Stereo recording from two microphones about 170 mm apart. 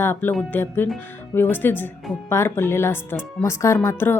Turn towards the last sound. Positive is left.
turn(degrees=15)  # may be behind; listen again after turning